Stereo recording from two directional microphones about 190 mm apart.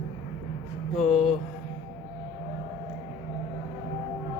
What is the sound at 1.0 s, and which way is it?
Music, 35° left (ahead or behind).